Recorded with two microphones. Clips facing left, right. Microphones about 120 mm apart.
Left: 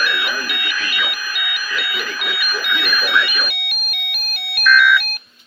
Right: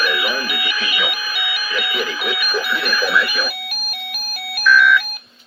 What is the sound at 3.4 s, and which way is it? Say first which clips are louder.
Music: right 3 dB; 35° right (ahead or behind).